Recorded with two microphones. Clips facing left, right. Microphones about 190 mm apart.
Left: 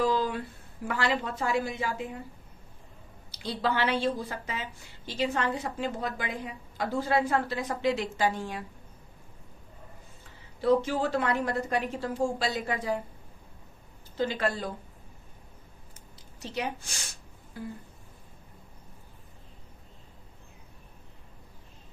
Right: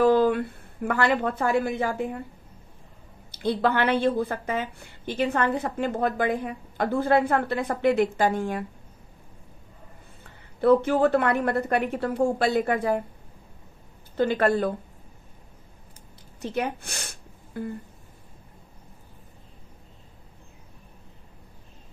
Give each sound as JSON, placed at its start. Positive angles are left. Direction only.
{"t": 0.0, "sound": "a woman's voice", "side_deg": -60}
{"t": 3.3, "sound": "speech", "side_deg": -55}
{"t": 10.6, "sound": "speech", "side_deg": -60}
{"t": 14.1, "sound": "speech", "side_deg": -55}
{"t": 16.3, "sound": "a woman's voice", "side_deg": -55}